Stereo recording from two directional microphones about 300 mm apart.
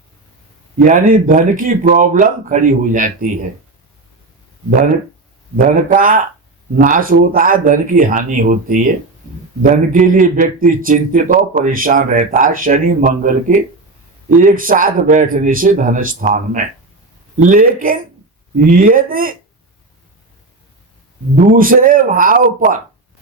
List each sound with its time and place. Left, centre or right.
0.8 s a man's voice: right
5.5 s a man's voice: right
21.5 s a man's voice: right